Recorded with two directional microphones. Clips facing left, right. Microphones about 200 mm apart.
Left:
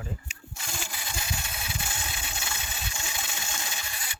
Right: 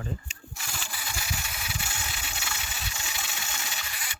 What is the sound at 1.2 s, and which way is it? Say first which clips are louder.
Engine: left 2 dB; 25° left (ahead or behind).